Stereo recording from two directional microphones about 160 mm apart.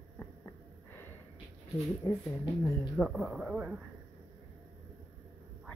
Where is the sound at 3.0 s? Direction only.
Centre (ahead or behind).